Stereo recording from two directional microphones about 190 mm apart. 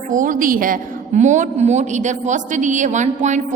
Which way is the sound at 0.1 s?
45° right (ahead or behind).